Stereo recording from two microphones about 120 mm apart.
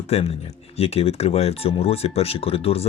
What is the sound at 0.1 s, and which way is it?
Speech, 55° left (ahead or behind).